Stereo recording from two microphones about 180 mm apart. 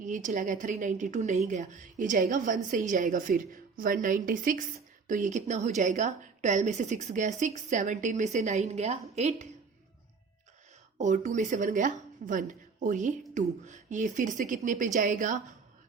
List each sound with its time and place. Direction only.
0.0 s a woman's voice: 45° right (ahead or behind)
10.9 s a woman's voice: 40° right (ahead or behind)